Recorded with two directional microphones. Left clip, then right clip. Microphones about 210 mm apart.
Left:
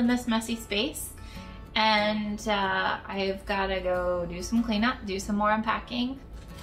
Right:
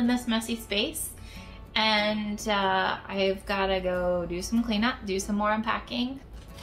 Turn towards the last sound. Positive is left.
turn(degrees=-15)  # may be behind; listen again after turning